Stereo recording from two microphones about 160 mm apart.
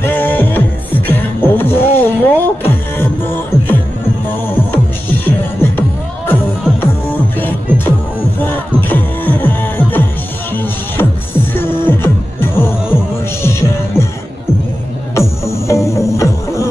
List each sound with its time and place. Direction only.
0.0 s music: 15° left (ahead or behind)
15.1 s music: 20° left (ahead or behind)